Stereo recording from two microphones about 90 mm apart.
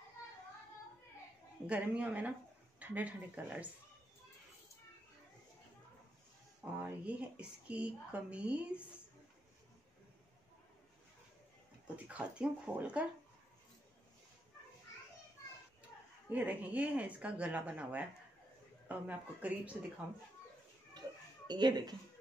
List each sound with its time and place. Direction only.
1.7 s speech: 15° right (ahead or behind)
6.6 s speech: 15° right (ahead or behind)
12.1 s speech: 15° right (ahead or behind)
16.3 s speech: 15° right (ahead or behind)
21.5 s speech: 50° right (ahead or behind)